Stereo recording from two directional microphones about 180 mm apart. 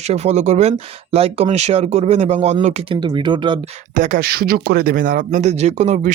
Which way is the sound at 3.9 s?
50° right (ahead or behind).